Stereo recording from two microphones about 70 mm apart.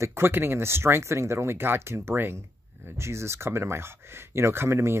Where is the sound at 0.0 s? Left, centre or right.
Right.